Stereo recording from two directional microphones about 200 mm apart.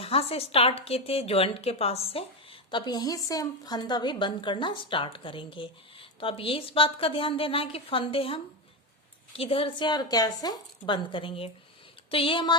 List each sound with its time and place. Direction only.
0.0 s a woman's voice: 30° left (ahead or behind)